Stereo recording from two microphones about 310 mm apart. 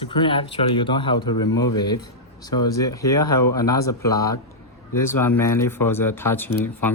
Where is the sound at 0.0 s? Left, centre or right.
Centre.